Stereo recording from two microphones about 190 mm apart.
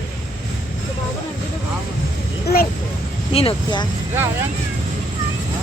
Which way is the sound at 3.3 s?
25° left (ahead or behind).